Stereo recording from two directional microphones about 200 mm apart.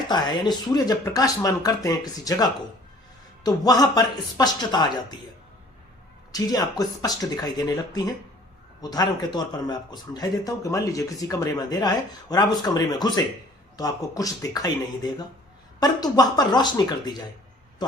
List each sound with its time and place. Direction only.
0.1 s speech: 20° left (ahead or behind)
6.3 s speech: 20° left (ahead or behind)
15.8 s speech: 20° left (ahead or behind)